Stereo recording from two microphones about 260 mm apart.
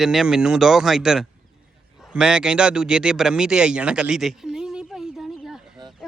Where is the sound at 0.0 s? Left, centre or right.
Centre.